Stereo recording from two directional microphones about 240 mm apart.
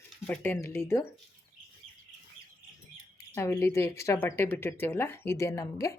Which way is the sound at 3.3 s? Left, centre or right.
Centre.